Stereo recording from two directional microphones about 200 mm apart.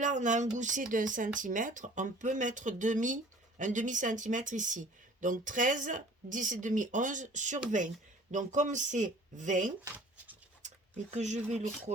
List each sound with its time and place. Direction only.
0.0 s speech: 40° right (ahead or behind)
11.1 s speech: 35° right (ahead or behind)